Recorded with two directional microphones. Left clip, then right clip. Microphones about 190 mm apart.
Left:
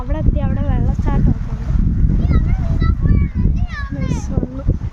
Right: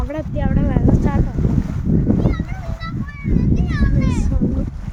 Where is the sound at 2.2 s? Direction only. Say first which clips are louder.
Right 1 dB; 60° right (ahead or behind).